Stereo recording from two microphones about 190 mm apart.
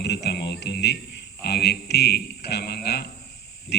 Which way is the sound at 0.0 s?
60° left (ahead or behind).